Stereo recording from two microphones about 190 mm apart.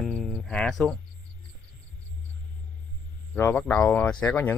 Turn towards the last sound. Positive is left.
turn(degrees=10)  # may be behind; listen again after turning